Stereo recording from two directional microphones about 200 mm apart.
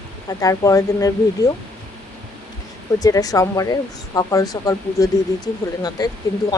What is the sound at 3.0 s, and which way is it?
Speech, 20° left (ahead or behind).